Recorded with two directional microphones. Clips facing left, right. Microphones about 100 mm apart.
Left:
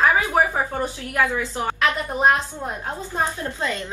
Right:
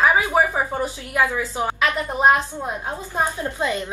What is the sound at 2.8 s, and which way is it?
A woman's voice, 15° right (ahead or behind).